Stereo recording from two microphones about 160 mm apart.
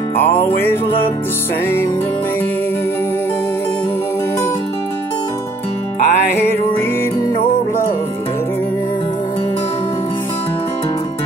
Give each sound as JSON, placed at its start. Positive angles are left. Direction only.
{"t": 0.6, "sound": "music", "side_deg": 15}
{"t": 5.9, "sound": "music", "side_deg": 70}